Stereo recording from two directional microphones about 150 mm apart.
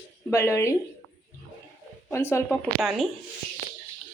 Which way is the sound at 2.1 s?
15° left (ahead or behind).